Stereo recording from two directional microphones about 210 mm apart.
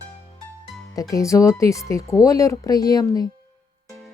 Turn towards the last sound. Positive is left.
turn(degrees=15)  # may be behind; listen again after turning